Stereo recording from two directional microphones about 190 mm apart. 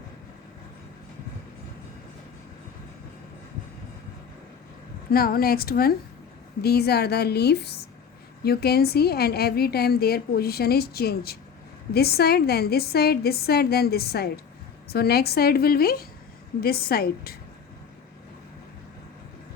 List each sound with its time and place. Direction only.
5.1 s a woman's voice: 50° left (ahead or behind)